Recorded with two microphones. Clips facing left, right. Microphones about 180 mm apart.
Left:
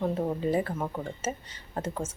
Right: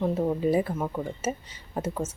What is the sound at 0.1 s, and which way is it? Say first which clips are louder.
Speech: right 3 dB; 10° right (ahead or behind).